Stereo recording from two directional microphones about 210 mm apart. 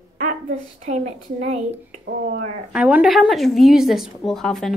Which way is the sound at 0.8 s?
35° right (ahead or behind).